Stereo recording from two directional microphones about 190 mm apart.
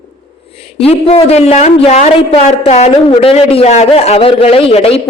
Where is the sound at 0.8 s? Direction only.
30° left (ahead or behind).